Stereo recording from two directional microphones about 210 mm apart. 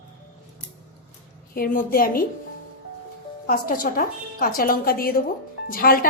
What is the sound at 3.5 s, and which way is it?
A woman's voice, 40° left (ahead or behind).